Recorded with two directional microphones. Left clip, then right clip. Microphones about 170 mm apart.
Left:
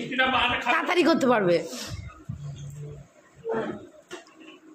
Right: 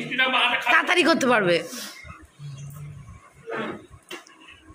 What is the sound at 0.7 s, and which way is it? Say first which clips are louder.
Speech: right 4 dB; 10° left (ahead or behind).